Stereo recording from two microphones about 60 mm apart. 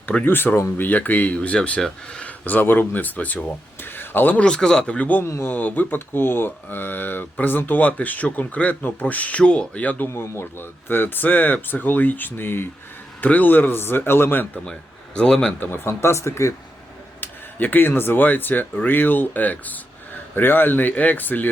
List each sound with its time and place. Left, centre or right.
0.3 s speech: left
3.9 s a sound: left
4.4 s a man's voice: centre
5.2 s speech: left
5.5 s speech: left
10.1 s speech: left
10.4 s speech: left
14.6 s a man's voice: centre
15.6 s speech: left
17.2 s speech: left